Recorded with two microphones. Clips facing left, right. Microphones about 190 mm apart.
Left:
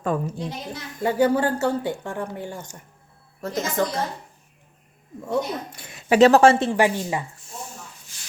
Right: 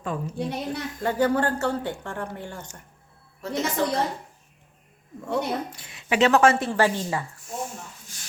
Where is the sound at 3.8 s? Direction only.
50° left (ahead or behind).